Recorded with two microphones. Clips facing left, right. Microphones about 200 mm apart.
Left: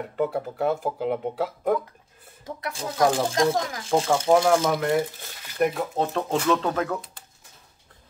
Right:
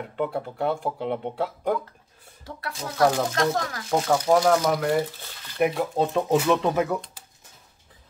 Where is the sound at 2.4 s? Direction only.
25° left (ahead or behind).